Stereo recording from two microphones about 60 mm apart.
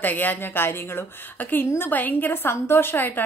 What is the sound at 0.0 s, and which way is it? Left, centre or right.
Speech, left.